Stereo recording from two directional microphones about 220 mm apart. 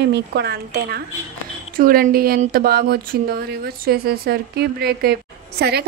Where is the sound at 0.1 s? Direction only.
50° right (ahead or behind).